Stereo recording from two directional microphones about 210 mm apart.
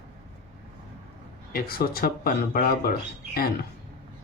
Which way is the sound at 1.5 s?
45° left (ahead or behind).